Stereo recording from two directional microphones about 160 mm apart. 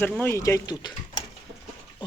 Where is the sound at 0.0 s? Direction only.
15° left (ahead or behind).